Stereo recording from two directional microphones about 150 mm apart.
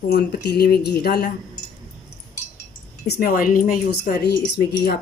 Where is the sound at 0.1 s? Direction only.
90° left.